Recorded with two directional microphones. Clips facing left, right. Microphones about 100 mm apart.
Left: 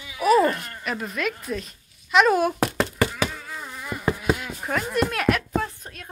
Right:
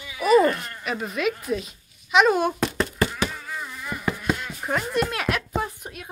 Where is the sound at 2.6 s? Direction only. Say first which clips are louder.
Left 1 dB; 65° left (ahead or behind).